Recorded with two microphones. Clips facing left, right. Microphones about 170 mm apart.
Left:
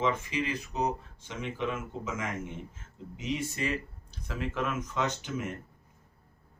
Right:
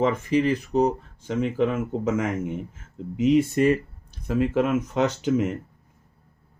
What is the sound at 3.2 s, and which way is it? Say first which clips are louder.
Speech: right 14 dB; 55° right (ahead or behind).